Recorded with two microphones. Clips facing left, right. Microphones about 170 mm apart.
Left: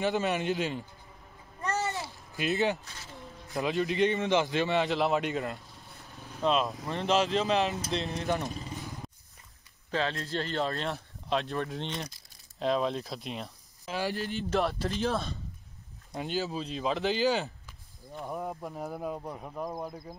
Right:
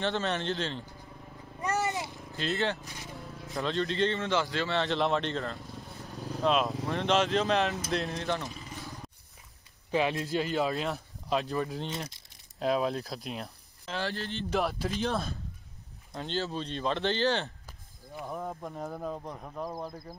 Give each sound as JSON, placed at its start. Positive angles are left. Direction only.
{"t": 0.0, "sound": "a man's voice", "side_deg": 10}
{"t": 1.6, "sound": "a sound", "side_deg": -15}
{"t": 2.3, "sound": "a man's voice", "side_deg": 15}
{"t": 6.1, "sound": "vehicle", "side_deg": -35}
{"t": 6.4, "sound": "speech", "side_deg": 0}
{"t": 9.8, "sound": "speech", "side_deg": -15}
{"t": 13.8, "sound": "a man's voice", "side_deg": 15}
{"t": 14.5, "sound": "speech", "side_deg": 0}
{"t": 16.1, "sound": "a man's voice", "side_deg": 10}